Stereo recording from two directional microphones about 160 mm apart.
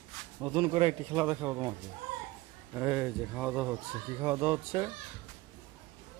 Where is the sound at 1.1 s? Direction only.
15° right (ahead or behind).